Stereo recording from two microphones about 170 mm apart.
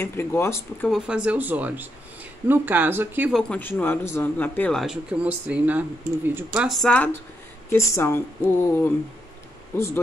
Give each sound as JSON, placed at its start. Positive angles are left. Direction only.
{"t": 0.0, "sound": "speech", "side_deg": 15}
{"t": 0.8, "sound": "speech", "side_deg": -5}
{"t": 3.3, "sound": "speech", "side_deg": 10}